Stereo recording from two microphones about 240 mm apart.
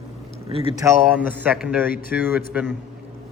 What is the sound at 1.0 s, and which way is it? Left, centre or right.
Speech, centre.